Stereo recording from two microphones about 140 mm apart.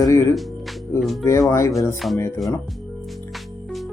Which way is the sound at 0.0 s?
20° left (ahead or behind).